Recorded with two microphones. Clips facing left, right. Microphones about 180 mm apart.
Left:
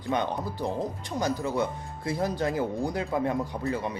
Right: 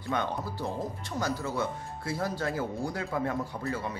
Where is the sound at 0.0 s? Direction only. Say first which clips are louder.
Left 3 dB; 15° left (ahead or behind).